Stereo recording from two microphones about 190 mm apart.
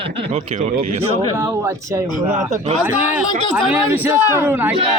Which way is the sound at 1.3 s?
15° right (ahead or behind).